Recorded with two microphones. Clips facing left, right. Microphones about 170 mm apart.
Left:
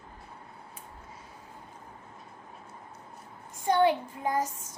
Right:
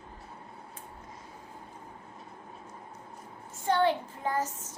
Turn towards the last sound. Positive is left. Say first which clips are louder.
# left 2 dB
turn(degrees=10)  # may be behind; listen again after turning